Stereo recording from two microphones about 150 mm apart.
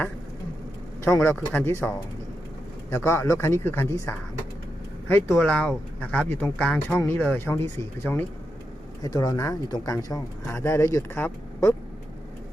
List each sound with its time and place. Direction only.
1.0 s speech: 15° left (ahead or behind)
5.3 s speech: 5° left (ahead or behind)